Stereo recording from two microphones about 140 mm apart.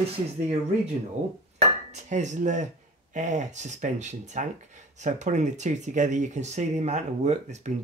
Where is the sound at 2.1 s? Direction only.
60° right (ahead or behind).